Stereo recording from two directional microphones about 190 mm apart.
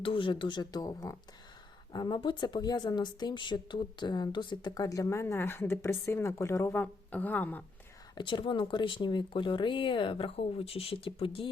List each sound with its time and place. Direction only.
0.0 s speech: 25° left (ahead or behind); by 7.6 s 10° left (ahead or behind)
8.1 s speech: 25° left (ahead or behind)